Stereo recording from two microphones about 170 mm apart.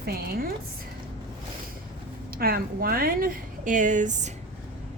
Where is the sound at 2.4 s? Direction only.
60° right (ahead or behind).